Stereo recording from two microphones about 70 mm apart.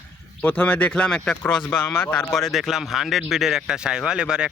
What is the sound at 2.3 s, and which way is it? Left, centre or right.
Speech, centre.